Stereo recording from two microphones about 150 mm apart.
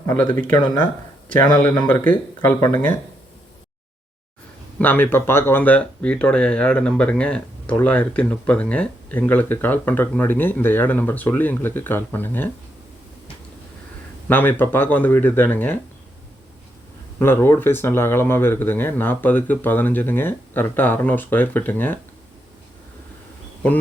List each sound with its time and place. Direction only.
0.0 s speech: 15° left (ahead or behind)
1.8 s speech: 10° left (ahead or behind)
4.8 s speech: 10° left (ahead or behind)
14.3 s speech: 10° left (ahead or behind)
17.2 s speech: 15° left (ahead or behind)